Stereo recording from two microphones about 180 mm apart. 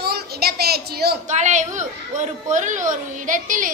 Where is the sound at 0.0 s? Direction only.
60° right (ahead or behind).